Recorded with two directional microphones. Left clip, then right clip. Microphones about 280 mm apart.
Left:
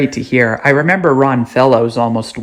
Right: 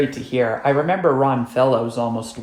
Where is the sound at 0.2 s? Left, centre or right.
Left.